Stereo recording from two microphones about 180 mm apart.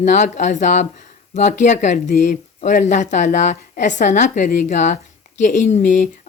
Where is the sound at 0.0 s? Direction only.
45° left (ahead or behind).